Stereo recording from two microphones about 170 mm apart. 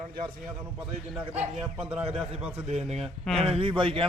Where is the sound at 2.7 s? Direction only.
40° right (ahead or behind).